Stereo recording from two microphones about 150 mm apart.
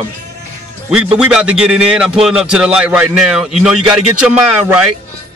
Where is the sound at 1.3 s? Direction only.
5° right (ahead or behind).